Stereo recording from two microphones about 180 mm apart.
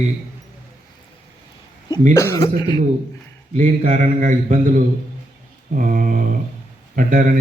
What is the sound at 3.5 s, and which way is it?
A man's voice, 45° right (ahead or behind).